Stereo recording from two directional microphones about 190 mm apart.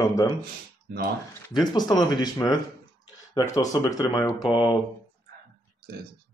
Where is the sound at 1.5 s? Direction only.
20° left (ahead or behind).